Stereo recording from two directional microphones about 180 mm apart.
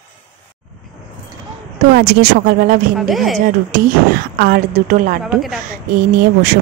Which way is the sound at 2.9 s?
Centre (ahead or behind).